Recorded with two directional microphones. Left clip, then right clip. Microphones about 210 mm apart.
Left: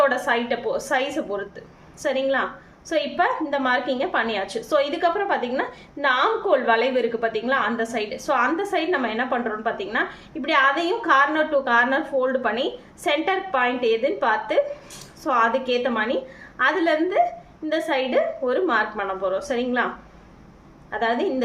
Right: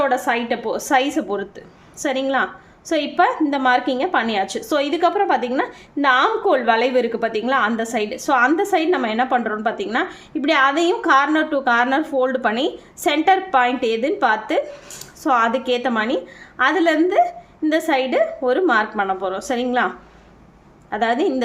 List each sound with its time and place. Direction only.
0.0 s a woman's voice: 35° right (ahead or behind)
20.9 s a woman's voice: 45° right (ahead or behind)